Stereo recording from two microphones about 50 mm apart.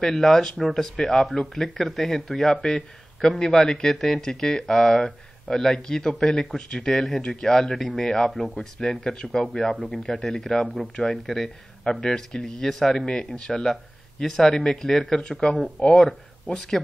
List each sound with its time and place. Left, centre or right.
0.0 s a man's voice: centre
2.5 s a man's voice: centre
16.5 s a man's voice: centre